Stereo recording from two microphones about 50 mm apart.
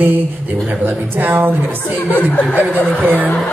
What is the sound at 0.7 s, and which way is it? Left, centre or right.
Speech, right.